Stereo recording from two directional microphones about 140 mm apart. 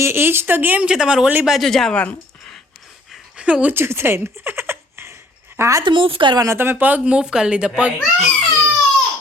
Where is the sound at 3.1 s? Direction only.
5° right (ahead or behind); by 5.8 s 20° right (ahead or behind).